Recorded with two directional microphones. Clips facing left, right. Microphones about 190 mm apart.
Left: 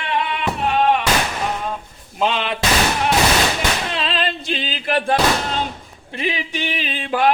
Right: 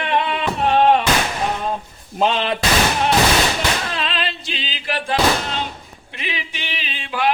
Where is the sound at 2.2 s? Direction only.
40° right (ahead or behind).